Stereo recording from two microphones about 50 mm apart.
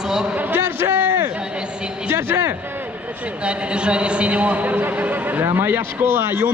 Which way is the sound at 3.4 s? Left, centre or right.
Right.